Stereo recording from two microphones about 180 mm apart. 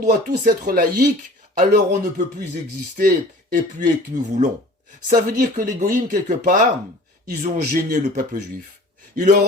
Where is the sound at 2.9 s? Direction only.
50° right (ahead or behind).